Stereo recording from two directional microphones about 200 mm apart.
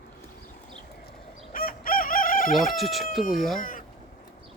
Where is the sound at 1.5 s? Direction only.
45° left (ahead or behind).